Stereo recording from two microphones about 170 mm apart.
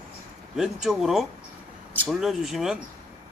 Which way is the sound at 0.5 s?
Centre (ahead or behind).